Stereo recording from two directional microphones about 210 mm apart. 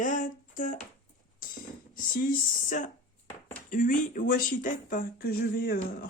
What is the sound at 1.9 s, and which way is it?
Speech, 40° left (ahead or behind).